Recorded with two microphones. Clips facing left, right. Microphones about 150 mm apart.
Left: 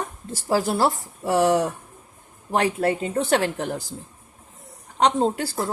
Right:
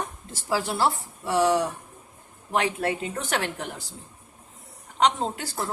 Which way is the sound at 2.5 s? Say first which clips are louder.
Left 4 dB; 35° left (ahead or behind).